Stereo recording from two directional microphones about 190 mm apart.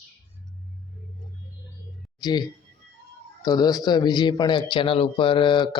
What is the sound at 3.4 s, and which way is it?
Speech, 20° left (ahead or behind).